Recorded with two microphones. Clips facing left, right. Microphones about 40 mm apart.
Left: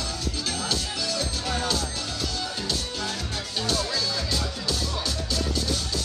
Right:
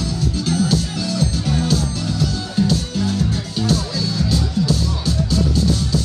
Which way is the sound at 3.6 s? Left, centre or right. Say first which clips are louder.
Right 5 dB; centre.